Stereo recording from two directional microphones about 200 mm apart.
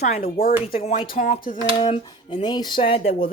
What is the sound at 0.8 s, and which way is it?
Speech, 30° left (ahead or behind).